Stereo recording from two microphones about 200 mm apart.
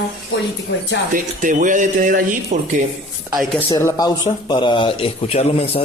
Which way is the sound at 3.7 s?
15° left (ahead or behind).